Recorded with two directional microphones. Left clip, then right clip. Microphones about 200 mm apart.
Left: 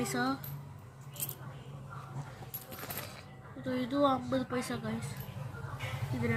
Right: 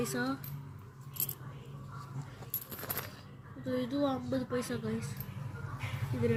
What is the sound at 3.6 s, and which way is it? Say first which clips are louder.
Speech: left 3 dB; 35° left (ahead or behind).